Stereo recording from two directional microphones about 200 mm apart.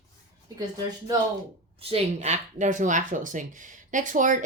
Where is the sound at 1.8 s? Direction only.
30° right (ahead or behind).